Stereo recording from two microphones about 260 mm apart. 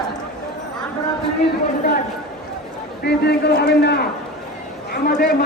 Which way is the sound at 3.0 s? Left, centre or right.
Left.